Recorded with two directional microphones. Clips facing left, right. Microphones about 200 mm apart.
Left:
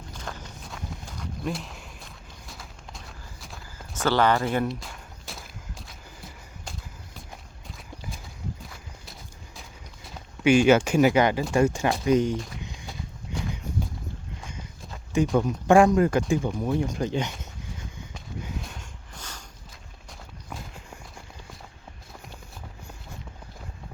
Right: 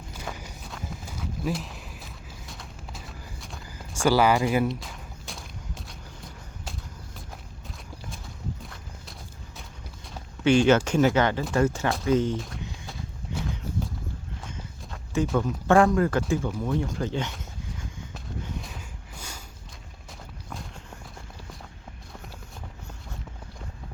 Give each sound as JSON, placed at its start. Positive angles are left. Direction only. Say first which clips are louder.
{"t": 0.1, "sound": "clip-clop", "louder": "right 1 dB", "side_deg": -10}
{"t": 3.9, "sound": "a sound", "louder": "right 1 dB", "side_deg": -10}
{"t": 7.7, "sound": "clip-clop", "louder": "left 2 dB", "side_deg": 0}
{"t": 9.6, "sound": "a sound", "louder": "right 1 dB", "side_deg": 5}
{"t": 11.5, "sound": "speech", "louder": "left 1 dB", "side_deg": 15}
{"t": 12.4, "sound": "walk", "louder": "even", "side_deg": 0}
{"t": 15.4, "sound": "speech", "louder": "left 2 dB", "side_deg": 15}
{"t": 18.4, "sound": "a sound", "louder": "even", "side_deg": 0}
{"t": 20.1, "sound": "walk", "louder": "even", "side_deg": 0}